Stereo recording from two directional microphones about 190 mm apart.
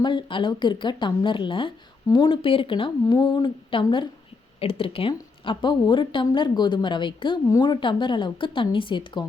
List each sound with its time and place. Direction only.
0.0 s a woman's voice: 25° left (ahead or behind)